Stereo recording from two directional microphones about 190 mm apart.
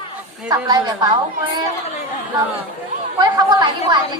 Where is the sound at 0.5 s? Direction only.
20° right (ahead or behind).